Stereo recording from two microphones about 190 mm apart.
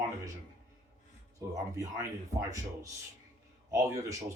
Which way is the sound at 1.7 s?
15° right (ahead or behind).